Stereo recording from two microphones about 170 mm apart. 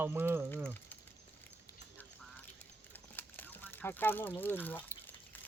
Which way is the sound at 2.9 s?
10° left (ahead or behind).